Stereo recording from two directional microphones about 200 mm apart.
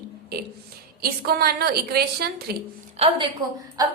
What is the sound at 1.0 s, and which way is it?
A woman's voice, 50° right (ahead or behind).